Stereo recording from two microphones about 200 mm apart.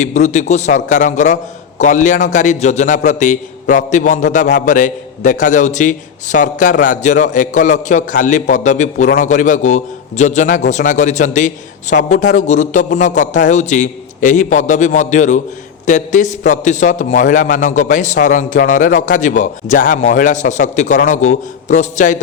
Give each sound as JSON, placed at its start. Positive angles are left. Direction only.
{"t": 0.0, "sound": "a man's voice", "side_deg": 35}